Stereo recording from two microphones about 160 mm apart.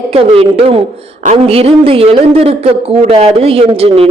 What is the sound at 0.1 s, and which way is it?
Speech, 40° right (ahead or behind).